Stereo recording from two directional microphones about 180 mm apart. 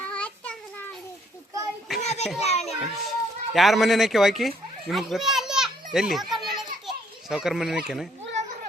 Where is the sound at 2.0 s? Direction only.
35° left (ahead or behind).